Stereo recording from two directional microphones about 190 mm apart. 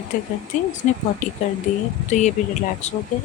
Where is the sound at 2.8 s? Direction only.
35° left (ahead or behind).